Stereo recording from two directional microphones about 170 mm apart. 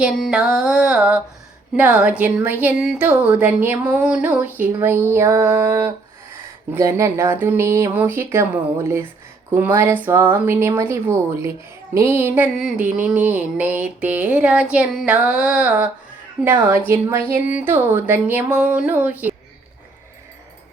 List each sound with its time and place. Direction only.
0.0 s music: 5° right (ahead or behind)
1.7 s speech: 10° right (ahead or behind)